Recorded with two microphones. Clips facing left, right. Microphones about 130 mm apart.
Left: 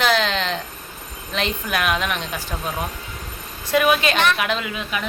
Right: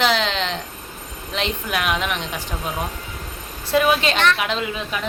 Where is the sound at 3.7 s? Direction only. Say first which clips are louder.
Even; 25° right (ahead or behind).